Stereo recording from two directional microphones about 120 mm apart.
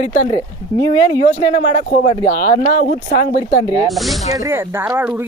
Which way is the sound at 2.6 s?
90° left.